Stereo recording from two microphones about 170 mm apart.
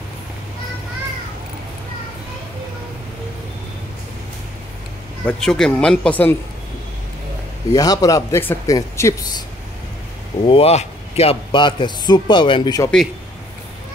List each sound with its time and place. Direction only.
5.2 s speech: 5° left (ahead or behind)
7.7 s a man's voice: 20° left (ahead or behind)
10.4 s a man's voice: 35° left (ahead or behind)